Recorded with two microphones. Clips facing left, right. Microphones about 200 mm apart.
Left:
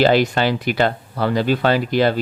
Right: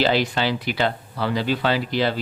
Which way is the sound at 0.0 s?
50° left (ahead or behind).